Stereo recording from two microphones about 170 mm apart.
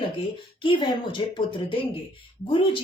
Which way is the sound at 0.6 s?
30° left (ahead or behind).